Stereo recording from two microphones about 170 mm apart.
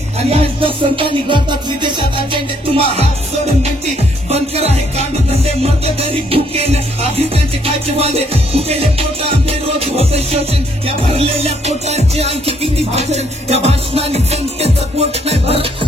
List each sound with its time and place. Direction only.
0.2 s music: 35° right (ahead or behind)
4.3 s music: 40° right (ahead or behind)